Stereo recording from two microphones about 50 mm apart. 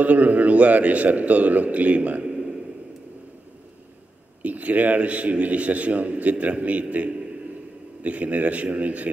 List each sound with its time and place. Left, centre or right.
0.0 s a man's voice: right
4.4 s a man's voice: right